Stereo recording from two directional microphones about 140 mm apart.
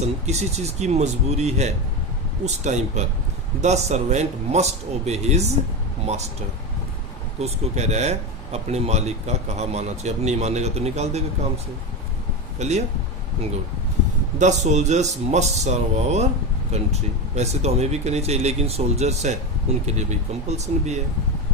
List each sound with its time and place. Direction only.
0.0 s speech: 50° right (ahead or behind)
7.3 s speech: 50° right (ahead or behind)
14.3 s speech: 55° right (ahead or behind)